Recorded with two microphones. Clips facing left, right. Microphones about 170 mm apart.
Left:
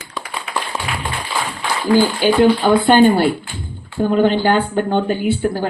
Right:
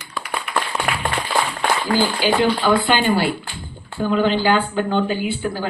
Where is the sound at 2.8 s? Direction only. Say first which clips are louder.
Left 7 dB; 50° left (ahead or behind).